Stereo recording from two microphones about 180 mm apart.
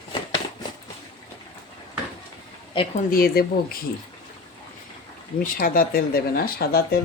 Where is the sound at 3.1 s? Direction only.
55° left (ahead or behind).